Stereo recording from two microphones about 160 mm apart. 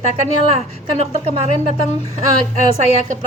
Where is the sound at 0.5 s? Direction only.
40° right (ahead or behind).